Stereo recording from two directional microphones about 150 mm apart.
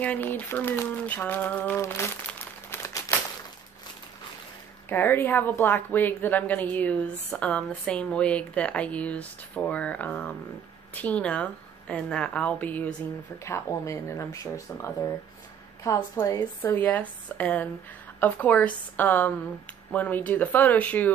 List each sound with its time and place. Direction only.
0.0 s speech: 10° left (ahead or behind)
4.8 s a woman's voice: 15° left (ahead or behind)